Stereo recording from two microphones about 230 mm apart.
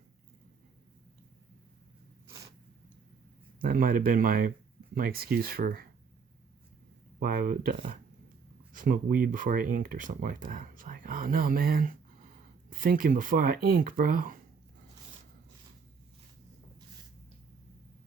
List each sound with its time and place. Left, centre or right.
3.6 s speech: right
7.2 s speech: right